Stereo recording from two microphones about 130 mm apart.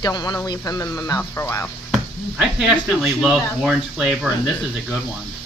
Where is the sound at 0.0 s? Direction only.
30° left (ahead or behind).